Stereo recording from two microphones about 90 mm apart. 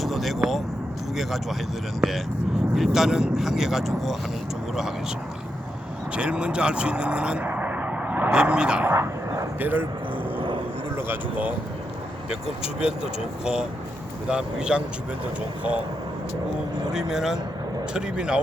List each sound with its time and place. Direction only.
0.0 s speech: centre (ahead or behind)
6.1 s speech: 10° right (ahead or behind)
9.0 s speech: 35° right (ahead or behind)
9.6 s speech: 20° right (ahead or behind)
10.9 s speech: 20° right (ahead or behind)
12.6 s speech: 90° left
13.4 s speech: 10° right (ahead or behind)
16.9 s speech: 5° right (ahead or behind)